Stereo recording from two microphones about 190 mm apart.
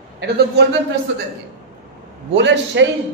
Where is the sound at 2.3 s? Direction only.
70° right (ahead or behind).